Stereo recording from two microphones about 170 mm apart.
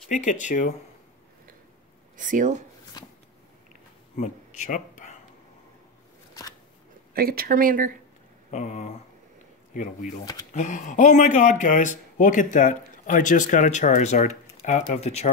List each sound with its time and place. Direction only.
0.1 s speech: 45° left (ahead or behind)
2.1 s speech: 50° right (ahead or behind)
3.0 s a sound: 20° left (ahead or behind)
4.2 s speech: 45° left (ahead or behind)
7.2 s speech: 60° right (ahead or behind)
8.5 s a sound: 40° left (ahead or behind)
10.5 s speech: 45° left (ahead or behind)